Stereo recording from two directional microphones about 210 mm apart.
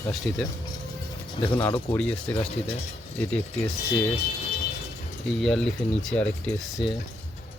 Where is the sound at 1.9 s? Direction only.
5° left (ahead or behind).